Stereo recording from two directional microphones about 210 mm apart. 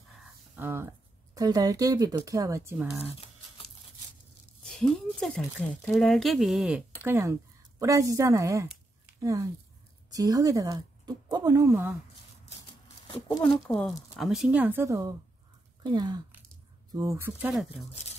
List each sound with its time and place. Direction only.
0.2 s speech: 10° right (ahead or behind)
4.6 s a woman's voice: centre (ahead or behind)
13.4 s a woman's voice: 5° left (ahead or behind); by 17.5 s 15° right (ahead or behind)
17.5 s speech: centre (ahead or behind)